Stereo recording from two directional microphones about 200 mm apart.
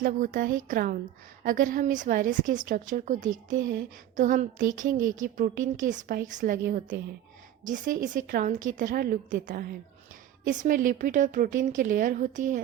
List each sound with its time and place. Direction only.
0.0 s a woman's voice: 45° right (ahead or behind)